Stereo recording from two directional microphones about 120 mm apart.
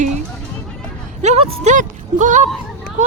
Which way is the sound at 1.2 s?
70° right (ahead or behind).